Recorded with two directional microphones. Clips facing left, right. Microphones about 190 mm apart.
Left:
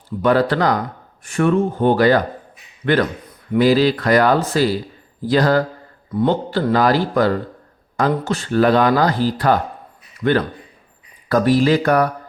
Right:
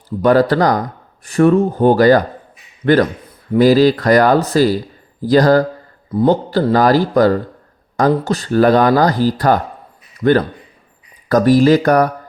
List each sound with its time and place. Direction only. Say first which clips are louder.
0.2 s a man's voice: right 4 dB; 40° right (ahead or behind)